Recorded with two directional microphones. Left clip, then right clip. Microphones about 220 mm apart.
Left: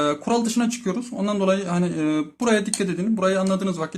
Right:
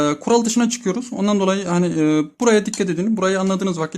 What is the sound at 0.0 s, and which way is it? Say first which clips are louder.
Speech: right 4 dB; 40° right (ahead or behind).